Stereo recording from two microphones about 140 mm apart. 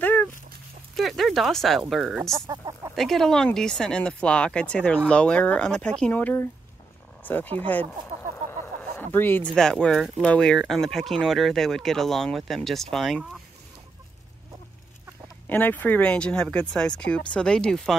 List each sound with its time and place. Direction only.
0.0 s dog: 10° left (ahead or behind)
0.9 s speech: centre (ahead or behind)
2.4 s speech: 25° right (ahead or behind)
3.0 s speech: centre (ahead or behind)
8.5 s chicken: 15° left (ahead or behind)
9.6 s speech: 5° left (ahead or behind)
15.4 s speech: 10° left (ahead or behind)